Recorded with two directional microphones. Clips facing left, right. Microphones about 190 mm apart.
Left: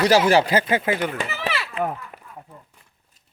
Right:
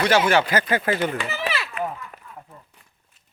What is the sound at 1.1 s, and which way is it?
Chop, 35° left (ahead or behind).